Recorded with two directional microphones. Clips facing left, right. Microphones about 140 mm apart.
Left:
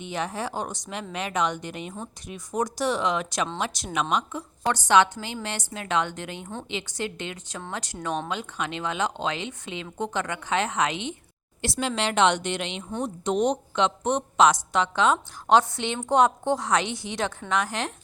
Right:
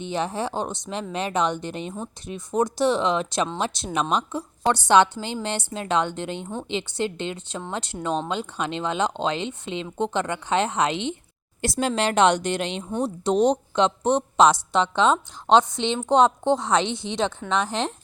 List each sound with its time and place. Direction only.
0.0 s a woman's voice: 30° right (ahead or behind)
11.6 s a woman's voice: 45° right (ahead or behind); by 17.9 s 25° right (ahead or behind)